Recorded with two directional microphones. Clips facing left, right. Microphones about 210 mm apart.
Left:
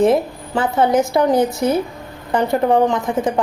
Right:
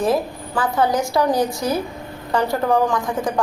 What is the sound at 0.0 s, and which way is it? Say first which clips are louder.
A woman's voice: left 5 dB; 25° left (ahead or behind).